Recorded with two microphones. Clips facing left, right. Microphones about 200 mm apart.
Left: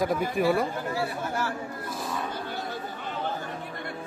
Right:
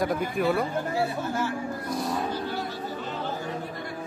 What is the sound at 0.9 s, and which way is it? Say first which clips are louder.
Speech: right 2 dB; 20° right (ahead or behind).